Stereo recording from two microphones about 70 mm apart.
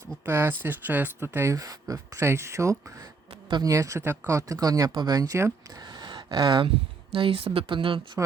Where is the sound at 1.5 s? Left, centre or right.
Right.